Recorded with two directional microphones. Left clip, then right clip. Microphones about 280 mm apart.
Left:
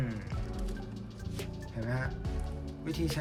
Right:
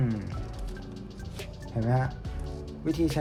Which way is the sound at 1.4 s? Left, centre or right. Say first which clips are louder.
Right 6 dB; centre.